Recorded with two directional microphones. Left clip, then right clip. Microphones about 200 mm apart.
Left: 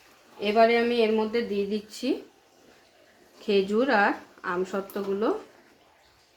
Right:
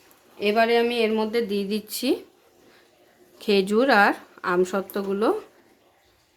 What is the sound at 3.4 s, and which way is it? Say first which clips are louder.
Speech: right 4 dB; 45° right (ahead or behind).